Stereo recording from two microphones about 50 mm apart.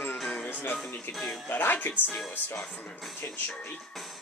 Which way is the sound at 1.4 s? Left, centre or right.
Left.